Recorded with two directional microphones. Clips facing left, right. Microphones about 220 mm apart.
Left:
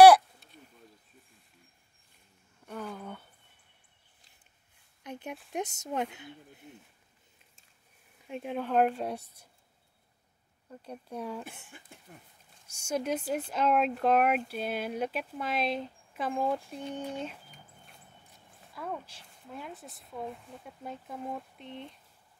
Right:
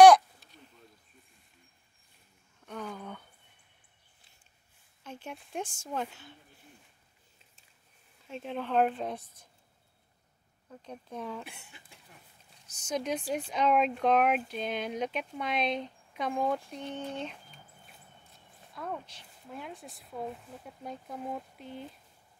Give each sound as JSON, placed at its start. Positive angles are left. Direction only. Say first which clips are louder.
{"t": 2.6, "sound": "a sound", "louder": "left 1 dB", "side_deg": 5}
{"t": 5.0, "sound": "a sound", "louder": "left 3 dB", "side_deg": 15}
{"t": 5.9, "sound": "speech", "louder": "left 3 dB", "side_deg": 20}
{"t": 8.3, "sound": "a woman's voice", "louder": "left 2 dB", "side_deg": 10}
{"t": 10.7, "sound": "a woman's voice", "louder": "left 1 dB", "side_deg": 10}
{"t": 11.4, "sound": "speech", "louder": "left 3 dB", "side_deg": 50}
{"t": 12.8, "sound": "a woman's voice", "louder": "left 1 dB", "side_deg": 5}
{"t": 18.7, "sound": "a sound", "louder": "even", "side_deg": 5}
{"t": 19.5, "sound": "speech", "louder": "even", "side_deg": 0}